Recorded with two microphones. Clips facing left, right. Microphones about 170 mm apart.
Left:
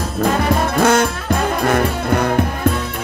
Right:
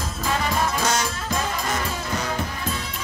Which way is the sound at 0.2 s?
60° left (ahead or behind).